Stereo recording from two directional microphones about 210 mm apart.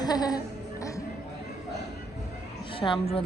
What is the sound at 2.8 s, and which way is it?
Speech, 15° left (ahead or behind).